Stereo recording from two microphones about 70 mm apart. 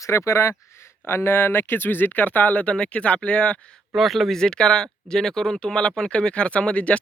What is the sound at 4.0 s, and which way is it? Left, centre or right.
Speech, centre.